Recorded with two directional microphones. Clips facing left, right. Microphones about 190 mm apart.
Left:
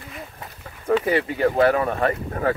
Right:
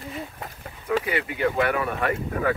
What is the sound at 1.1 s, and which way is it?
Speech, 40° left (ahead or behind).